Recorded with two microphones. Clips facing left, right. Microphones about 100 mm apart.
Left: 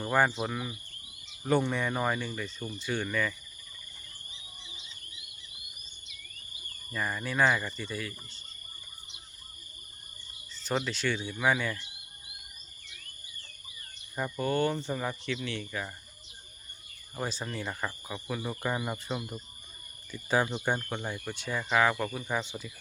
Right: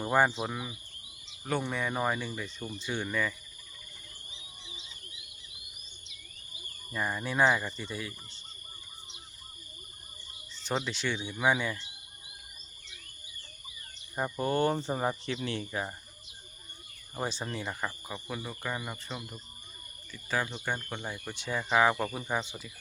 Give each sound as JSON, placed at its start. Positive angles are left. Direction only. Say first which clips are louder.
{"t": 0.0, "sound": "speech", "louder": "even", "side_deg": -15}
{"t": 6.9, "sound": "speech", "louder": "even", "side_deg": -15}
{"t": 10.5, "sound": "speech", "louder": "left 1 dB", "side_deg": -20}
{"t": 14.2, "sound": "speech", "louder": "even", "side_deg": -20}
{"t": 14.7, "sound": "speech", "louder": "right 3 dB", "side_deg": -35}
{"t": 17.2, "sound": "speech", "louder": "even", "side_deg": -15}
{"t": 18.4, "sound": "speech", "louder": "left 7 dB", "side_deg": 10}
{"t": 20.1, "sound": "speech", "louder": "left 5 dB", "side_deg": 20}
{"t": 20.9, "sound": "speech", "louder": "left 3 dB", "side_deg": 0}
{"t": 21.3, "sound": "speech", "louder": "right 1 dB", "side_deg": -20}
{"t": 22.2, "sound": "speech", "louder": "even", "side_deg": -5}